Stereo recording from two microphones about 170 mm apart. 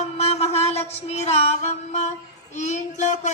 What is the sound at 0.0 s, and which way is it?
Music, 40° left (ahead or behind).